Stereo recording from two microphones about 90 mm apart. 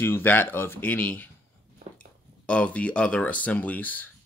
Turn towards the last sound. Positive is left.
turn(degrees=20)  # may be behind; listen again after turning